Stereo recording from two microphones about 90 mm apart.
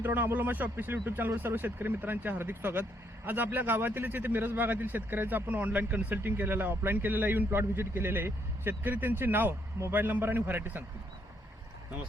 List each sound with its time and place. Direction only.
0.0 s a man's voice: 20° right (ahead or behind)